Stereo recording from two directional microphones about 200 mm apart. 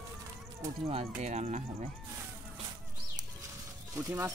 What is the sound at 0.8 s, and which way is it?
Speech, 30° right (ahead or behind).